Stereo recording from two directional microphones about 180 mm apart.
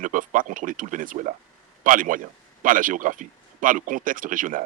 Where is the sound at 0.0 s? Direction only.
45° right (ahead or behind).